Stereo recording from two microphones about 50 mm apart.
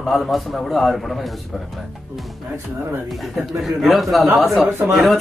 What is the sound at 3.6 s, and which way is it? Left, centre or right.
Speech, centre.